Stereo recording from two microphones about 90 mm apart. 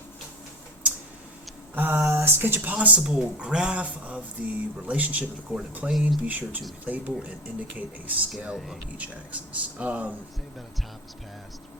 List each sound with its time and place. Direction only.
1.7 s speech: 20° right (ahead or behind)
5.9 s speech: centre (ahead or behind)
6.2 s speech: 15° right (ahead or behind)
8.5 s speech: centre (ahead or behind)
9.0 s speech: 15° right (ahead or behind)